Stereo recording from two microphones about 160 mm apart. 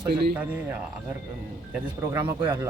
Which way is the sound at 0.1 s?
90° right.